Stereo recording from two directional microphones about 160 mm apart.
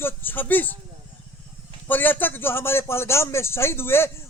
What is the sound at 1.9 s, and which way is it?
Speech, 10° left (ahead or behind).